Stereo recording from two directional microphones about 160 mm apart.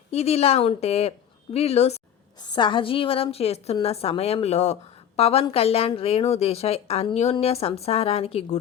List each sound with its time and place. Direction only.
0.1 s a woman's voice: 40° left (ahead or behind)
2.4 s a woman's voice: 30° left (ahead or behind)